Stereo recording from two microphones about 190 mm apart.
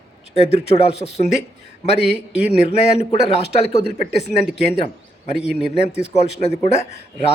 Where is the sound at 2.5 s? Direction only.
35° left (ahead or behind).